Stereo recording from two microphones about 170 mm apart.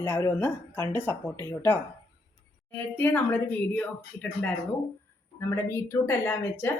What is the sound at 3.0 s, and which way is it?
Speech, 10° left (ahead or behind).